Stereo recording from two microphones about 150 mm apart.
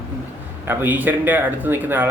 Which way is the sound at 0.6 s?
15° right (ahead or behind).